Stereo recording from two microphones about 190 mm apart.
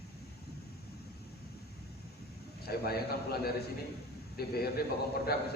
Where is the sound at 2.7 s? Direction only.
55° left (ahead or behind).